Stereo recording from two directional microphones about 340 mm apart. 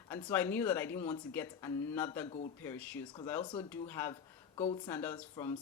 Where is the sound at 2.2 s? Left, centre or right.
Centre.